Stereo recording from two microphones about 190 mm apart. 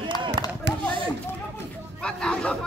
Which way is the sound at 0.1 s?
20° left (ahead or behind).